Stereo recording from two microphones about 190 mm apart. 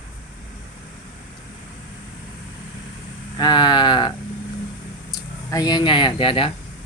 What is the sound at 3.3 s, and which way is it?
Speech, 25° left (ahead or behind).